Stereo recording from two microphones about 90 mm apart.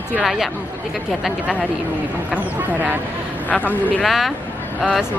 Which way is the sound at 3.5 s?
15° left (ahead or behind).